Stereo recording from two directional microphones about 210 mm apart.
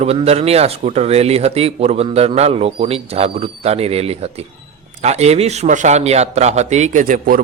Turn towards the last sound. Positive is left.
turn(degrees=-40)  # may be behind; listen again after turning